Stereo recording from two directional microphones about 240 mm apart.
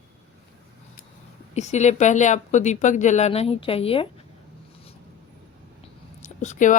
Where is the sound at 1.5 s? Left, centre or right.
Left.